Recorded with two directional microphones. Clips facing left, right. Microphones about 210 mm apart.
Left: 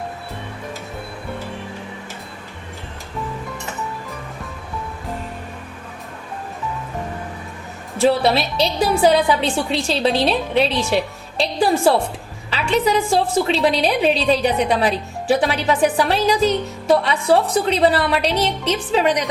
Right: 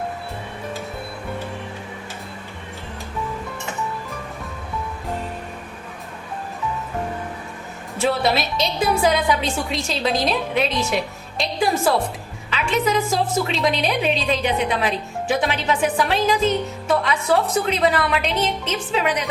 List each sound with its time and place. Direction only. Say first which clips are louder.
7.9 s a woman's voice: left 4 dB; 35° left (ahead or behind)